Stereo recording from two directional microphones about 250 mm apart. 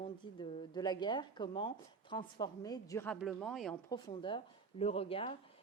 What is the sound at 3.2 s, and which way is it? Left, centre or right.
Speech, centre.